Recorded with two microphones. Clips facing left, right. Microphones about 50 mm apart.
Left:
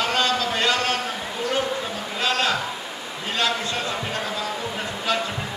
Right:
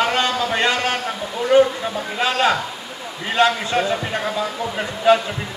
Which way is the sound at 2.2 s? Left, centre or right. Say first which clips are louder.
Right 4 dB; centre.